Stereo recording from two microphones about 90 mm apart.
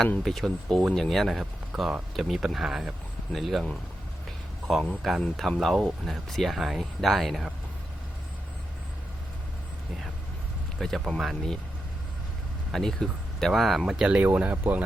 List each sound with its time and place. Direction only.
0.2 s speech: 5° left (ahead or behind)
10.8 s speech: 5° left (ahead or behind)
12.7 s speech: 5° left (ahead or behind); by 14.8 s 20° right (ahead or behind)